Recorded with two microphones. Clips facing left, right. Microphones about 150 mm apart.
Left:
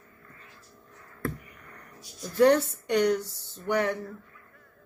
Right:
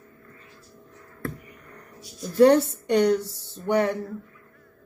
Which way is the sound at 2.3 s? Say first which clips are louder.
Right 4 dB; 30° right (ahead or behind).